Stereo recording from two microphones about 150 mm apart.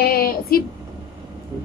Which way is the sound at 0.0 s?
90° left.